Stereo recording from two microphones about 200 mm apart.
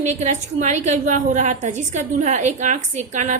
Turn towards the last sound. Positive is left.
turn(degrees=-35)  # may be behind; listen again after turning